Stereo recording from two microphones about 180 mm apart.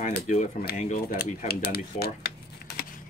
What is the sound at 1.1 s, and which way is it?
Speech, 55° left (ahead or behind).